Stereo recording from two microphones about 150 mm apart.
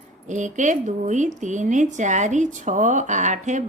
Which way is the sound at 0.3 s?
55° right (ahead or behind).